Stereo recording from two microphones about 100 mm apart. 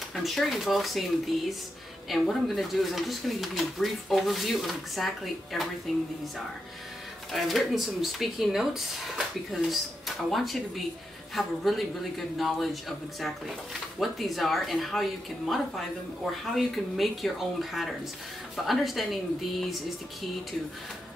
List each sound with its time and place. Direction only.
0.1 s speech: centre (ahead or behind)
7.3 s speech: centre (ahead or behind)
13.9 s speech: centre (ahead or behind)